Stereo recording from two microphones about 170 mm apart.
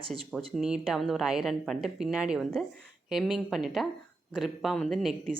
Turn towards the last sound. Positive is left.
turn(degrees=0)  # may be behind; listen again after turning